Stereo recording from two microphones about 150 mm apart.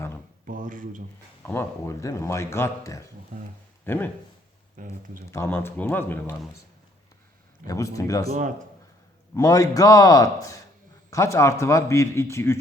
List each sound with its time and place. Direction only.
0.4 s speech: 65° right (ahead or behind)
1.4 s speech: 15° left (ahead or behind)
3.3 s speech: 65° right (ahead or behind)
3.8 s speech: 15° left (ahead or behind)
4.8 s speech: 65° right (ahead or behind)
5.2 s speech: 20° left (ahead or behind)
7.7 s speech: 20° left (ahead or behind)
8.3 s speech: 55° right (ahead or behind)
9.3 s speech: 20° left (ahead or behind)